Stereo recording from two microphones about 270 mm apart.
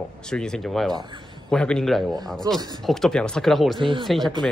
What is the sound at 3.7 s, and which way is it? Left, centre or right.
Speech, centre.